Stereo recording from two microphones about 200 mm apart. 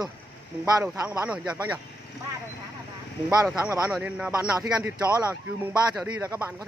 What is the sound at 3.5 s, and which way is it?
Speech, 5° right (ahead or behind).